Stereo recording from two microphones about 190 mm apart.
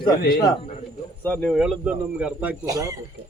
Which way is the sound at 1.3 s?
5° left (ahead or behind).